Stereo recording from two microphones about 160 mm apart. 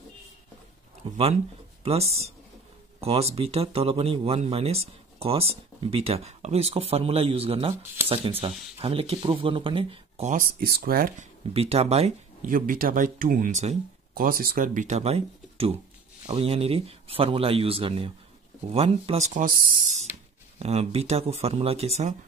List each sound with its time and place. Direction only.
1.1 s speech: 40° right (ahead or behind)
10.3 s speech: 60° right (ahead or behind)
11.5 s speech: 40° right (ahead or behind)
12.4 s speech: 60° right (ahead or behind)
13.5 s speech: 45° right (ahead or behind)
14.1 s speech: 65° right (ahead or behind)
20.5 s speech: 40° right (ahead or behind)